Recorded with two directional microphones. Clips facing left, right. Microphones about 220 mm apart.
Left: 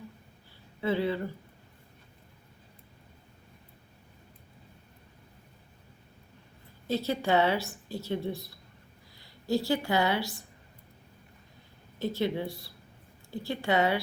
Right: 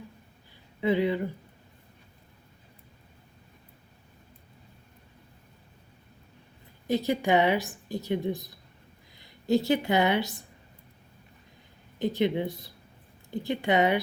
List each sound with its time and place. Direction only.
0.8 s a woman's voice: 15° right (ahead or behind)
6.8 s a woman's voice: 15° right (ahead or behind)
11.9 s speech: 15° right (ahead or behind)